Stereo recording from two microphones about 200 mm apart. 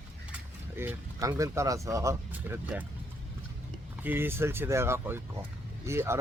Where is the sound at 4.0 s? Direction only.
10° right (ahead or behind).